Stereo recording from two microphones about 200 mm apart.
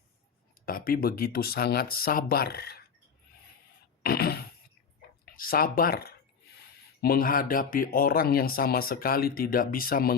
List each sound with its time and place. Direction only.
0.6 s speech: 45° left (ahead or behind)
4.0 s a sound: 50° left (ahead or behind)
5.2 s speech: 45° left (ahead or behind)